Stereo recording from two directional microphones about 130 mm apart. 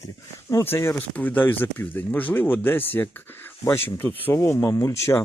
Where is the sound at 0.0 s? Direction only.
20° left (ahead or behind).